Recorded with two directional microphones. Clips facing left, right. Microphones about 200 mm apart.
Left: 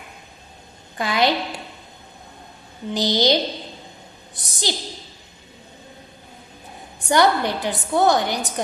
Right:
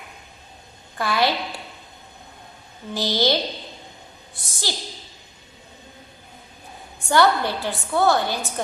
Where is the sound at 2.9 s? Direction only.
15° left (ahead or behind).